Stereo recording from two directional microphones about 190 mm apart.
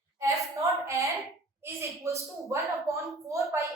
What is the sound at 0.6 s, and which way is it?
A woman's voice, 15° right (ahead or behind).